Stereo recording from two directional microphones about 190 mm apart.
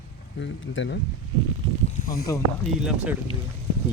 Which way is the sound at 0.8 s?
75° left (ahead or behind).